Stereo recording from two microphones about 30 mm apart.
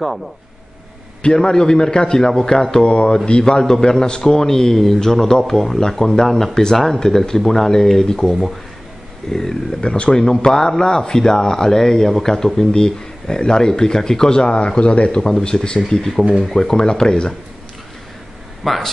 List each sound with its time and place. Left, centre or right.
1.2 s a man's voice: left
2.8 s a man's voice: left
3.6 s a man's voice: centre
9.8 s a man's voice: left
14.4 s a man's voice: left
18.6 s speech: centre